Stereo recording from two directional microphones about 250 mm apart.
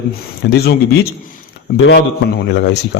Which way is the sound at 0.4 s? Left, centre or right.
Left.